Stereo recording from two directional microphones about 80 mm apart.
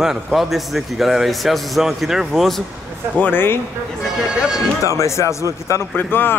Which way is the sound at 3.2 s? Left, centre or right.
Left.